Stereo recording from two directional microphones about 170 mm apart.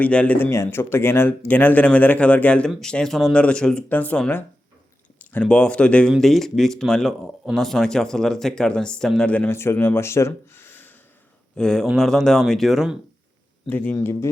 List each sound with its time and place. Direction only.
0.0 s speech: 10° left (ahead or behind)
13.7 s speech: 10° left (ahead or behind)